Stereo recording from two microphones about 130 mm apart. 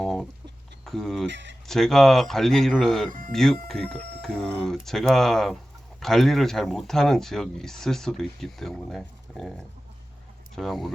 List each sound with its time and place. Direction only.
0.0 s a sound: 5° left (ahead or behind)
0.9 s speech: 5° left (ahead or behind)
3.1 s speech: 90° right
3.3 s speech: 5° left (ahead or behind)